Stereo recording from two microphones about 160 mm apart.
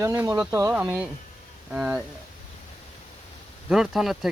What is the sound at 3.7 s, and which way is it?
Speech, centre (ahead or behind).